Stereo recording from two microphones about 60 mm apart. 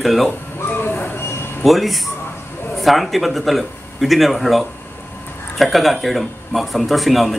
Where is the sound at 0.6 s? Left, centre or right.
Left.